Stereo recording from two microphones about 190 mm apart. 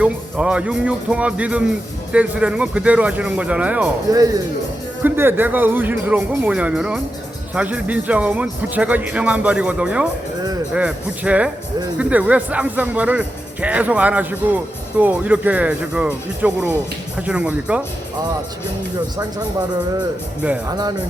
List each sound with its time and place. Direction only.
0.0 s speech: 5° right (ahead or behind)
5.0 s speech: 10° right (ahead or behind)
20.7 s speech: 20° right (ahead or behind)